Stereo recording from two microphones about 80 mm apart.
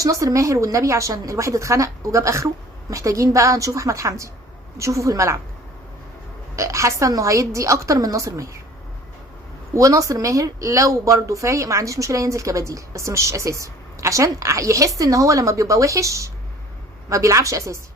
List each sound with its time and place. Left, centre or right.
0.0 s speech: right
6.6 s a woman's voice: right
9.7 s speech: right